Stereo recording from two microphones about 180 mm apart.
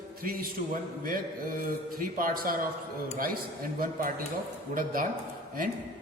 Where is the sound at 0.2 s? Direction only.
50° right (ahead or behind).